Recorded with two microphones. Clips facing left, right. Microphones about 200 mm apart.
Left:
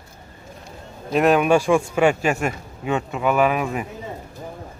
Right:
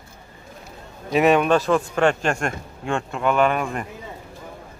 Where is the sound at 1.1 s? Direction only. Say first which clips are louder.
Even; centre (ahead or behind).